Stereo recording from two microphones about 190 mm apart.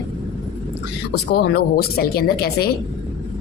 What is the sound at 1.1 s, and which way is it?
Speech, 55° left (ahead or behind).